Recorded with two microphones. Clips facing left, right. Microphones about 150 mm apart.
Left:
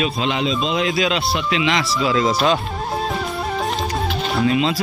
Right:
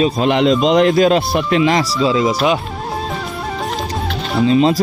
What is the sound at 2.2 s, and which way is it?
Speech, 10° right (ahead or behind).